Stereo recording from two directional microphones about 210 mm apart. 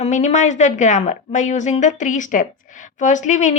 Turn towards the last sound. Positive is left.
turn(degrees=35)  # may be behind; listen again after turning